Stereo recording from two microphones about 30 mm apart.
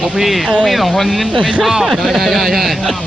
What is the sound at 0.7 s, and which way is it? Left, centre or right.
Speech, centre.